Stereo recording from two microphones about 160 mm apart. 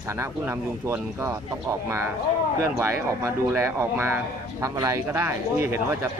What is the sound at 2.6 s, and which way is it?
Speech, 15° right (ahead or behind).